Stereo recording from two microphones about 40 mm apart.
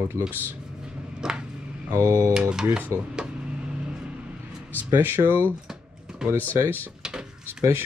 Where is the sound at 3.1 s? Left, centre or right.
Right.